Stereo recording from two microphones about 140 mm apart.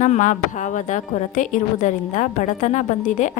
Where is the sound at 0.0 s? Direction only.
65° left (ahead or behind).